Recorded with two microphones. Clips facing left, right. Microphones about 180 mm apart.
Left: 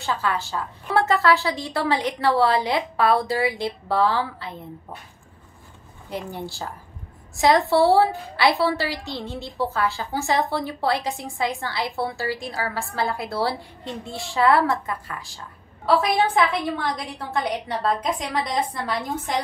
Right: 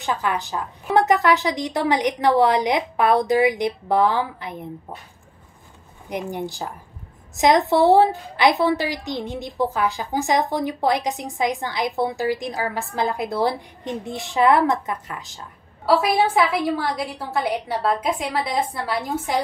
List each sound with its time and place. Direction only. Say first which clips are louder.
0.0 s a woman's voice: right 1 dB; 15° right (ahead or behind)
6.0 s a woman's voice: right 4 dB; 15° right (ahead or behind)
15.8 s a woman's voice: right 2 dB; 5° right (ahead or behind)